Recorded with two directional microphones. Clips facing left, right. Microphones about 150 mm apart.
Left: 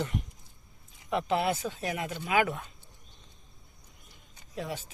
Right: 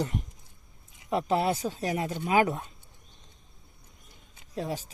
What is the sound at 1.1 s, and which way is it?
Speech, 35° right (ahead or behind).